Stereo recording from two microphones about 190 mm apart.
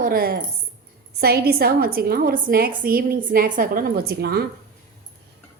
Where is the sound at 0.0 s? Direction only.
50° right (ahead or behind).